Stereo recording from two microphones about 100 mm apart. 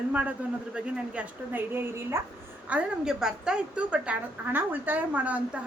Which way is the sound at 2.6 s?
10° right (ahead or behind).